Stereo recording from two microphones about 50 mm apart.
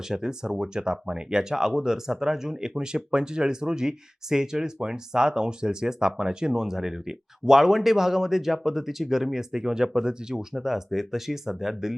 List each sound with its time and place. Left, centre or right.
0.1 s speech: centre